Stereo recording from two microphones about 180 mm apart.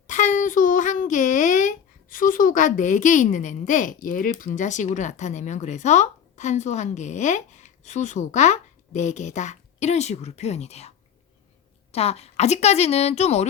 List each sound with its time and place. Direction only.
0.1 s a child's voice: 45° left (ahead or behind)